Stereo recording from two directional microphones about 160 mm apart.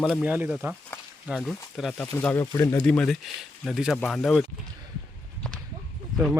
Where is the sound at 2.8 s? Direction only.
5° left (ahead or behind).